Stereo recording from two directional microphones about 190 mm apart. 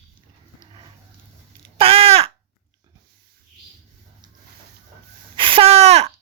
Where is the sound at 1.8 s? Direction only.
30° right (ahead or behind).